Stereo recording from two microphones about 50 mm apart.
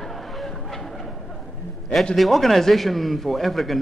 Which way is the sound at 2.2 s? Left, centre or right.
Centre.